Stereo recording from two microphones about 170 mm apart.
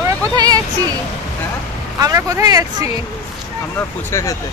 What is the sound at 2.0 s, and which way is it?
Speech, 20° right (ahead or behind).